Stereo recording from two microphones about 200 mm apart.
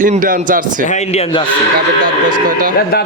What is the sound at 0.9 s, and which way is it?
Speech, 35° left (ahead or behind).